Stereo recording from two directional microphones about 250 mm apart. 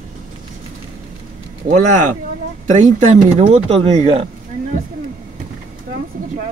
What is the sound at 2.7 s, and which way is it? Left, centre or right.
Speech, right.